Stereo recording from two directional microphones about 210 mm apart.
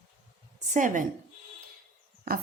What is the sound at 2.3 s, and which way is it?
Speech, 45° right (ahead or behind).